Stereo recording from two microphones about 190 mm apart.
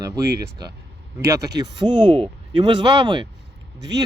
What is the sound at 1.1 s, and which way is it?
Speech, 15° right (ahead or behind).